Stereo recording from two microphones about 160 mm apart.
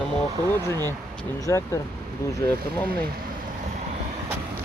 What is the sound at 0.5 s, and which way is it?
Speech, 15° left (ahead or behind).